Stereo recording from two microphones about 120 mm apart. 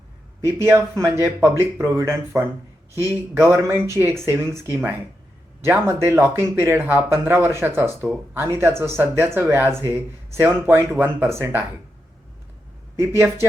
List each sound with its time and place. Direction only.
0.4 s speech: 20° right (ahead or behind)
13.0 s speech: 20° right (ahead or behind)